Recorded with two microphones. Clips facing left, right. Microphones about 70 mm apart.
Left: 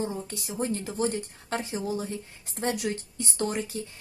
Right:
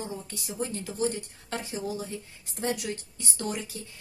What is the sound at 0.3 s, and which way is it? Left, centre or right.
A woman's voice, left.